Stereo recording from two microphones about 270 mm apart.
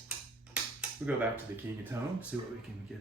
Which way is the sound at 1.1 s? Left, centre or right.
Centre.